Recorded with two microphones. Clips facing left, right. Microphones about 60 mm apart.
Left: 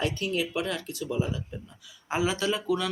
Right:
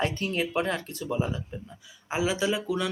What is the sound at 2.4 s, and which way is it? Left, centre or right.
Speech, centre.